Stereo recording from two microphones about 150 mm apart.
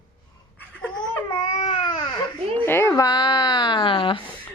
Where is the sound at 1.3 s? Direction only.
40° left (ahead or behind).